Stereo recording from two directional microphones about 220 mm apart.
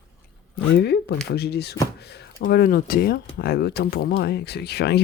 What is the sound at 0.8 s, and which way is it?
Speech, 50° left (ahead or behind).